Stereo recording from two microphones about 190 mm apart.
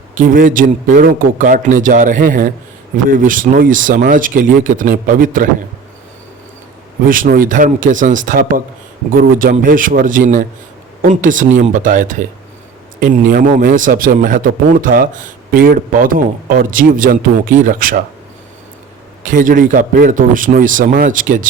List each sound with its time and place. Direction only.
0.1 s a man's voice: 45° right (ahead or behind)
7.0 s a man's voice: 45° right (ahead or behind)
19.2 s a man's voice: 45° right (ahead or behind)